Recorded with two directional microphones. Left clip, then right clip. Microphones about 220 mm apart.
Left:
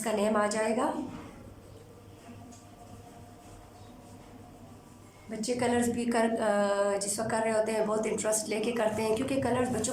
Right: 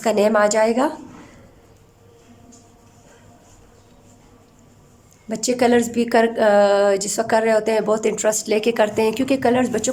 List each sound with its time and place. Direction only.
0.0 s a woman's voice: 45° right (ahead or behind)
5.3 s a woman's voice: 45° right (ahead or behind)